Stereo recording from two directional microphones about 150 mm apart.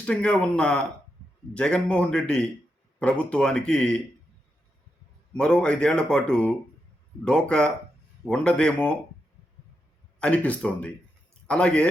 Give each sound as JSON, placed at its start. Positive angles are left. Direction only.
{"t": 0.0, "sound": "speech", "side_deg": 5}
{"t": 5.3, "sound": "speech", "side_deg": 5}
{"t": 10.2, "sound": "a man's voice", "side_deg": 10}